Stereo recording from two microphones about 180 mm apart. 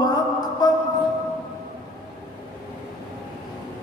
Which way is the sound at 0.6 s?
20° left (ahead or behind).